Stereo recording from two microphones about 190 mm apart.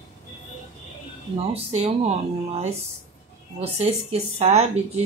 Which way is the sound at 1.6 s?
30° right (ahead or behind).